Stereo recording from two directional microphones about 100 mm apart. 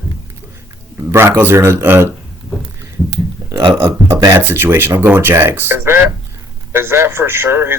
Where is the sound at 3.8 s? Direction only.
30° right (ahead or behind).